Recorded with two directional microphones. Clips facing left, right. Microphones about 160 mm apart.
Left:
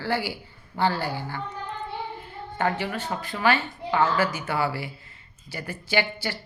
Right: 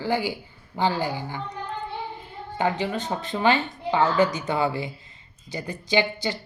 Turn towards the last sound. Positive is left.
turn(degrees=-20)  # may be behind; listen again after turning